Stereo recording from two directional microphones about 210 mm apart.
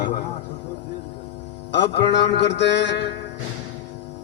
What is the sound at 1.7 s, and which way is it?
A man's voice, 55° left (ahead or behind).